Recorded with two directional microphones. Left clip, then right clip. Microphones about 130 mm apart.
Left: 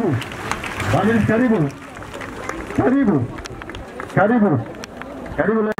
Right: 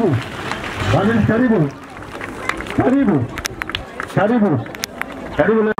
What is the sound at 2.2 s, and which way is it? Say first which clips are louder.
Run: right 6 dB; 30° right (ahead or behind).